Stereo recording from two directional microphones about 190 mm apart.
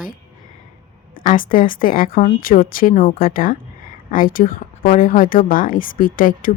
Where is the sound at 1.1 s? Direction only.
45° left (ahead or behind).